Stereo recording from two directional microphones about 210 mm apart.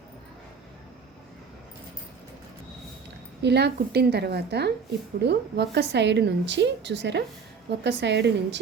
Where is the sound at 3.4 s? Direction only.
55° right (ahead or behind).